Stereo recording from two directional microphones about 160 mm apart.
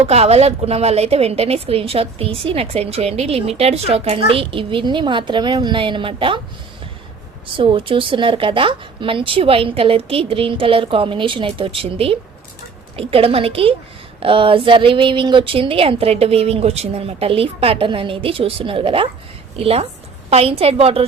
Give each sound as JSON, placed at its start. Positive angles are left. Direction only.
{"t": 0.0, "sound": "a woman's voice", "side_deg": -40}
{"t": 7.5, "sound": "a woman's voice", "side_deg": -30}